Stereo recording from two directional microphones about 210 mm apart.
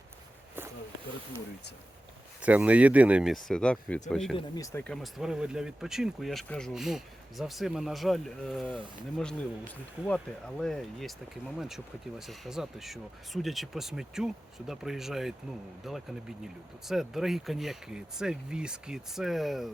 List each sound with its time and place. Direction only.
2.4 s speech: 5° right (ahead or behind)
4.4 s speech: 15° left (ahead or behind); by 19.7 s centre (ahead or behind)